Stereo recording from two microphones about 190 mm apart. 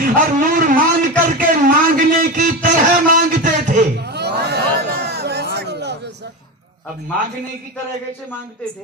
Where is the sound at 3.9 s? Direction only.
60° right (ahead or behind).